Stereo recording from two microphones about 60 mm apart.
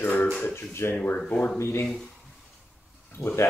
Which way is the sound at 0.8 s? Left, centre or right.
Left.